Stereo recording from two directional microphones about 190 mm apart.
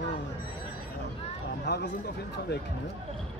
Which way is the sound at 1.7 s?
65° left (ahead or behind).